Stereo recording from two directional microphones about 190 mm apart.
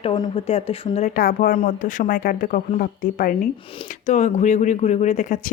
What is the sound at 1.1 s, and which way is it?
A woman's voice, 50° left (ahead or behind).